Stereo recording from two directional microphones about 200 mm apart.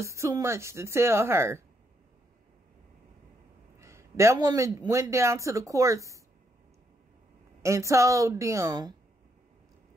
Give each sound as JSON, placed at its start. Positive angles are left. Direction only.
{"t": 0.0, "sound": "speech", "side_deg": -15}
{"t": 3.8, "sound": "speech", "side_deg": -15}
{"t": 7.6, "sound": "speech", "side_deg": -15}